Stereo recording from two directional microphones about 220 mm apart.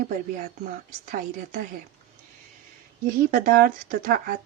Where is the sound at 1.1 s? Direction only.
35° right (ahead or behind).